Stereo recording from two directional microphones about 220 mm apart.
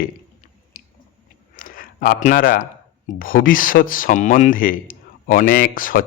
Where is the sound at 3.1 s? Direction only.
40° left (ahead or behind).